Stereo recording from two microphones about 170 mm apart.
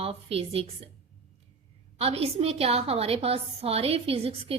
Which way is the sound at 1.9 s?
35° right (ahead or behind).